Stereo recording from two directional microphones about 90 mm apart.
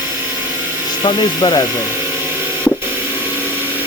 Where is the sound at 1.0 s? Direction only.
50° left (ahead or behind).